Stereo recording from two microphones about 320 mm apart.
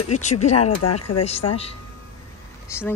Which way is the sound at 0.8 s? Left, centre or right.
Left.